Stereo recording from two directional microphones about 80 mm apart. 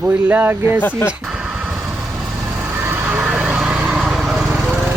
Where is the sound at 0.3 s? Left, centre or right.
Right.